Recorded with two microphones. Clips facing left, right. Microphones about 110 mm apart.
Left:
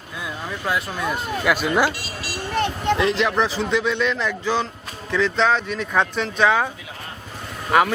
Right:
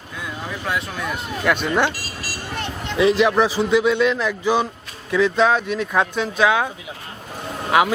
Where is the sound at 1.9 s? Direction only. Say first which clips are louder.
Left 1 dB; 40° right (ahead or behind).